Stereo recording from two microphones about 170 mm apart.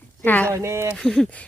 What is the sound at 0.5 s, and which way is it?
Speech, 15° right (ahead or behind).